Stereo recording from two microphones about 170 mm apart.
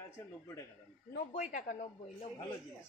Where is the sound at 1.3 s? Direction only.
45° left (ahead or behind).